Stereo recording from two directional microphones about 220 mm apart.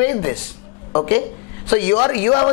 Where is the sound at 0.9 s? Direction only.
25° left (ahead or behind).